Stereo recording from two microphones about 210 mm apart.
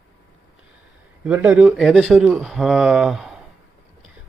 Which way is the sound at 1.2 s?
5° right (ahead or behind).